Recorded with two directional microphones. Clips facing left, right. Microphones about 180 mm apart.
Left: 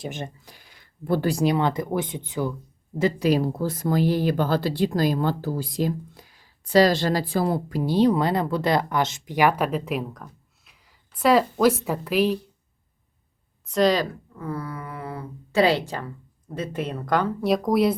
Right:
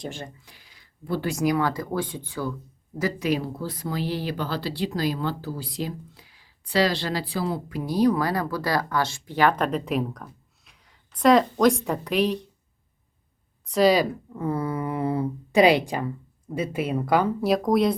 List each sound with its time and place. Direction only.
0.1 s speech: 20° left (ahead or behind)
0.4 s a sound: 50° left (ahead or behind)
1.3 s speech: 30° left (ahead or behind)
3.0 s speech: 35° left (ahead or behind)
7.7 s a woman's voice: 30° left (ahead or behind); by 12.4 s 5° left (ahead or behind)
13.7 s speech: 5° right (ahead or behind)
14.3 s speech: 25° right (ahead or behind); by 17.9 s centre (ahead or behind)